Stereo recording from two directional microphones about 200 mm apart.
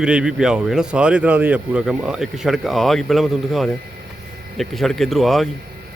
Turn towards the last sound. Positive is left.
turn(degrees=0)  # may be behind; listen again after turning